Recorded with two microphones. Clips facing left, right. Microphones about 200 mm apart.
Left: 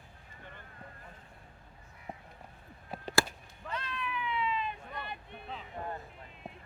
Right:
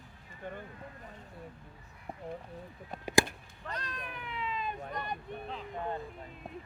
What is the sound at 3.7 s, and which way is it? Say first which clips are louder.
Cat: left 3 dB; 40° right (ahead or behind).